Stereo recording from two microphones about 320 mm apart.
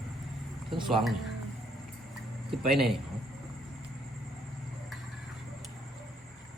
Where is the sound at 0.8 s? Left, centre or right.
Centre.